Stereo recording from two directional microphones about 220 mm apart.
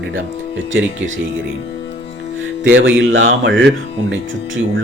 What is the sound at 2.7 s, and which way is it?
A man's voice, 60° right (ahead or behind).